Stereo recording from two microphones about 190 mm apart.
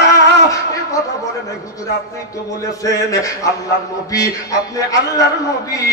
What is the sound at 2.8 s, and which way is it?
Music, 20° left (ahead or behind).